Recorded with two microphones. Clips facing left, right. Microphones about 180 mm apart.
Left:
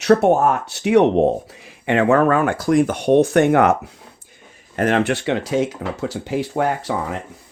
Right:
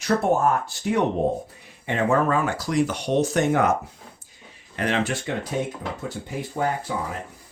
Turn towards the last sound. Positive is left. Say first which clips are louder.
# left 5 dB
turn(degrees=80)